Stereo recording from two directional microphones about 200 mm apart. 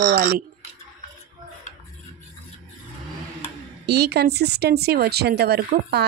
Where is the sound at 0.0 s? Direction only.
50° right (ahead or behind).